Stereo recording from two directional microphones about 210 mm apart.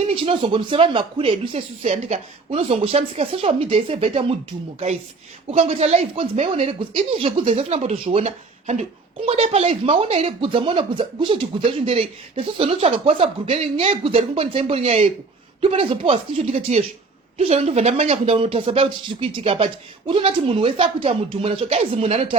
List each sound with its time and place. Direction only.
0.1 s speech: 25° right (ahead or behind)
5.5 s speech: 30° right (ahead or behind)